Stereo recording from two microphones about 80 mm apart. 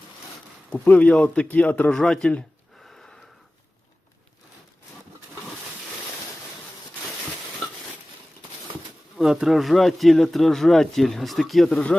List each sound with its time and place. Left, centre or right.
0.7 s a man's voice: centre
9.1 s speech: centre